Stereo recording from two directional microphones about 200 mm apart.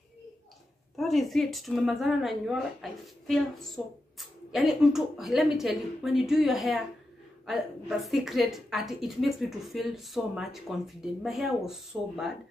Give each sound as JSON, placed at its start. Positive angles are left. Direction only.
{"t": 0.9, "sound": "a woman's voice", "side_deg": 0}